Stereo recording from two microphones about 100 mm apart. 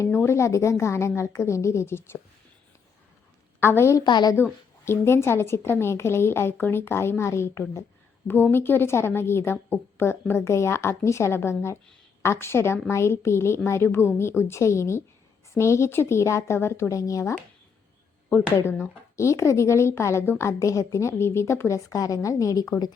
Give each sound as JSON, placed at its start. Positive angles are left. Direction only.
{"t": 0.1, "sound": "a woman's voice", "side_deg": 25}
{"t": 3.6, "sound": "a woman's voice", "side_deg": 25}
{"t": 4.0, "sound": "speech", "side_deg": 45}
{"t": 4.9, "sound": "a woman's voice", "side_deg": 25}
{"t": 18.3, "sound": "a woman's voice", "side_deg": 25}